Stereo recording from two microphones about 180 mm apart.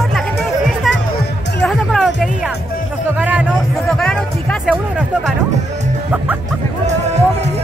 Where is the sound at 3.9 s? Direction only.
5° left (ahead or behind).